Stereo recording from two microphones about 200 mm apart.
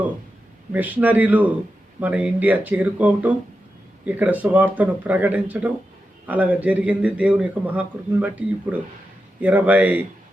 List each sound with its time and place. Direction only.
0.7 s a man's voice: 10° right (ahead or behind)